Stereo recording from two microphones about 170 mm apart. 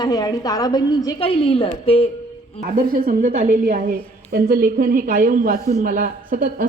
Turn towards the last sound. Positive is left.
turn(degrees=-55)  # may be behind; listen again after turning